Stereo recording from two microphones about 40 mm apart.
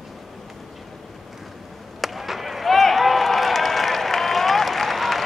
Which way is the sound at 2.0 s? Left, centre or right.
Centre.